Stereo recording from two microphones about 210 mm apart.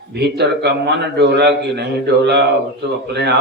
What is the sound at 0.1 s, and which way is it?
A man's voice, 50° right (ahead or behind).